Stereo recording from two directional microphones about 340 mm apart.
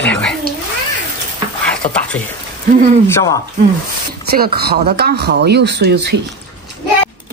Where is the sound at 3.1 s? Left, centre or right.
Centre.